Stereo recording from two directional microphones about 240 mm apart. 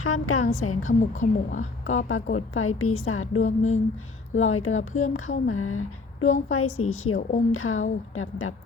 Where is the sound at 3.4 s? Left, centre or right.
Left.